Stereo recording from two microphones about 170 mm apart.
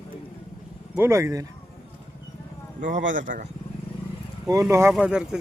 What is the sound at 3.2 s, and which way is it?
Speech, 50° right (ahead or behind).